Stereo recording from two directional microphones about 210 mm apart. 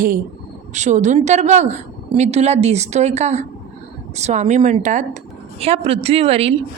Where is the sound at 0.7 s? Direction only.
35° right (ahead or behind).